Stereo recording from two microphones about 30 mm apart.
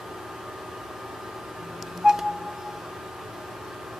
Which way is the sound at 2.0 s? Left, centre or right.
Centre.